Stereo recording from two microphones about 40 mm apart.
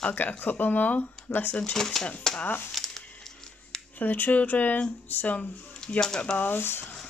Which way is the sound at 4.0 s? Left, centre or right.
Left.